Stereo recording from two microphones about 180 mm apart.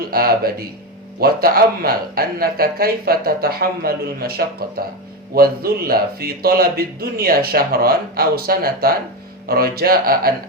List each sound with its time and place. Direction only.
0.1 s speech: 55° right (ahead or behind)